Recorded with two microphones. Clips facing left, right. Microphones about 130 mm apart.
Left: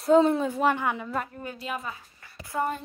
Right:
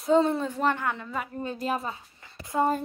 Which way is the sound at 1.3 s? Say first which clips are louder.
Right 5 dB; 25° right (ahead or behind).